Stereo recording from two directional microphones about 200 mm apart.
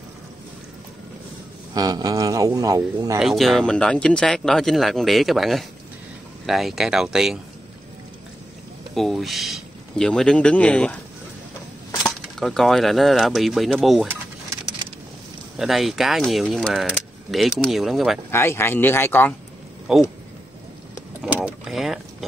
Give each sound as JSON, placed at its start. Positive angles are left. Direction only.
{"t": 1.7, "sound": "speech", "side_deg": -20}
{"t": 3.2, "sound": "speech", "side_deg": 0}
{"t": 8.9, "sound": "speech", "side_deg": 0}
{"t": 12.0, "sound": "speech", "side_deg": 0}
{"t": 15.5, "sound": "speech", "side_deg": 0}
{"t": 18.3, "sound": "speech", "side_deg": 10}
{"t": 19.9, "sound": "speech", "side_deg": 0}
{"t": 21.5, "sound": "vehicle", "side_deg": 0}